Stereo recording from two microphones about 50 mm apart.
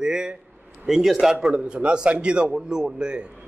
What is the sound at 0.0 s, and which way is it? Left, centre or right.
A man's voice, centre.